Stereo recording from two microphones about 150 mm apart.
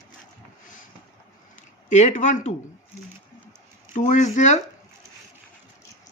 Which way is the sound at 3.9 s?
55° left (ahead or behind).